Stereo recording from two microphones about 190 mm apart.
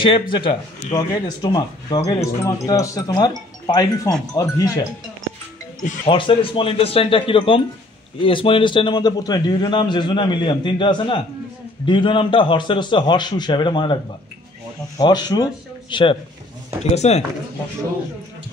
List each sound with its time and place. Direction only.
0.0 s a man's voice: 25° left (ahead or behind)
6.0 s a man's voice: 25° left (ahead or behind)
15.0 s speech: 20° left (ahead or behind)